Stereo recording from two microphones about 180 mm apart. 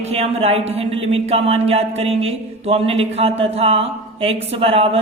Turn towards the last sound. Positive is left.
turn(degrees=-30)  # may be behind; listen again after turning